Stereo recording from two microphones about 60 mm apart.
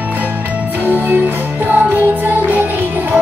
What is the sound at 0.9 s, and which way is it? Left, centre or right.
Music, right.